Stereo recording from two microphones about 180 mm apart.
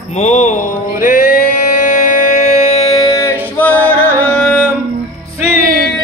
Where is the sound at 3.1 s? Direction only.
15° left (ahead or behind).